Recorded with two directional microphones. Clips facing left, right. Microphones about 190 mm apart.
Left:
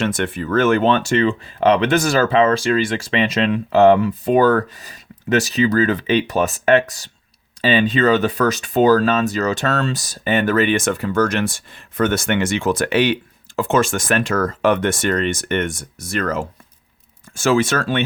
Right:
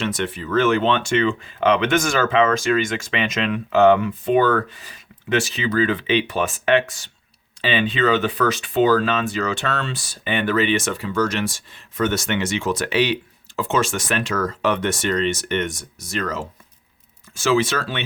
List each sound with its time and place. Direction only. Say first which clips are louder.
0.0 s speech: left 4 dB; 50° left (ahead or behind)